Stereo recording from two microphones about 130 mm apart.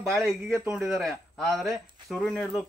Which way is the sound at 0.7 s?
Centre (ahead or behind).